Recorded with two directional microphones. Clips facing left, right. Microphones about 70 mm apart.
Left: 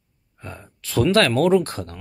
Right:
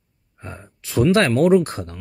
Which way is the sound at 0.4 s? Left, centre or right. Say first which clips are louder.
Right 1 dB; right.